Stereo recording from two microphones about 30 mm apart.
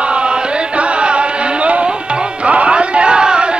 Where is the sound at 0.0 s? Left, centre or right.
Right.